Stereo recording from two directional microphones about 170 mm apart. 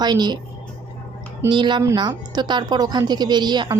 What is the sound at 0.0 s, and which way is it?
Speech, 25° right (ahead or behind).